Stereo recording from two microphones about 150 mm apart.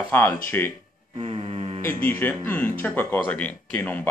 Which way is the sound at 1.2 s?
40° right (ahead or behind).